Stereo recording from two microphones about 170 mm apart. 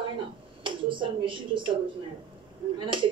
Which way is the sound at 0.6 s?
30° right (ahead or behind).